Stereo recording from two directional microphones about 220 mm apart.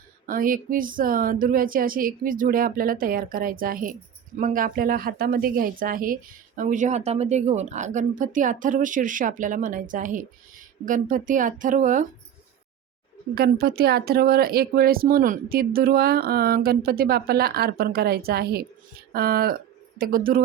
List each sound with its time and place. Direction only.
0.3 s a woman's voice: 40° right (ahead or behind)
13.3 s a woman's voice: 45° right (ahead or behind)